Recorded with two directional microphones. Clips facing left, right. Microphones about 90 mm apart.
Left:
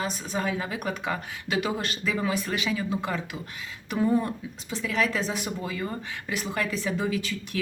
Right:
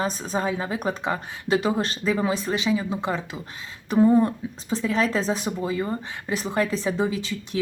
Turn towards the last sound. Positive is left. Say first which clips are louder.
# right 1 dB
turn(degrees=-25)  # may be behind; listen again after turning